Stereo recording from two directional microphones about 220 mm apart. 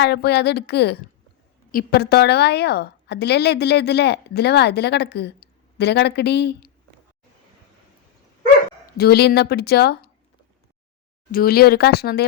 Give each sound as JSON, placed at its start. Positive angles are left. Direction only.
{"t": 0.0, "sound": "a woman's voice", "side_deg": 50}
{"t": 8.9, "sound": "a woman's voice", "side_deg": 45}
{"t": 11.3, "sound": "a woman's voice", "side_deg": 40}